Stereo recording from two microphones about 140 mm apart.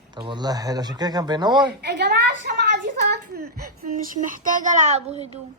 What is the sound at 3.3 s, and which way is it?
Speech, 90° right.